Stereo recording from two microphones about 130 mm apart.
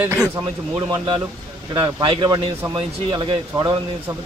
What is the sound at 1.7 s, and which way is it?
Speech, 35° right (ahead or behind).